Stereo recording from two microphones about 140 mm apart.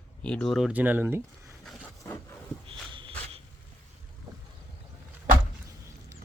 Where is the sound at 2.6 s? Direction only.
40° right (ahead or behind).